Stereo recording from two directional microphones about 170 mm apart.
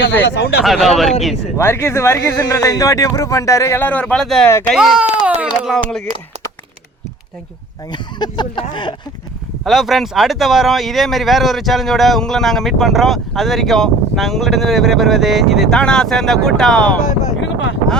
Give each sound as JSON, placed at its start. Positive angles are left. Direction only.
{"t": 0.0, "sound": "speech", "side_deg": 85}
{"t": 0.6, "sound": "speech", "side_deg": 0}
{"t": 1.5, "sound": "speech", "side_deg": 15}
{"t": 4.4, "sound": "speech", "side_deg": 15}
{"t": 4.7, "sound": "speech", "side_deg": -5}
{"t": 7.9, "sound": "speech", "side_deg": 25}
{"t": 9.6, "sound": "speech", "side_deg": 0}
{"t": 17.4, "sound": "a sound", "side_deg": 90}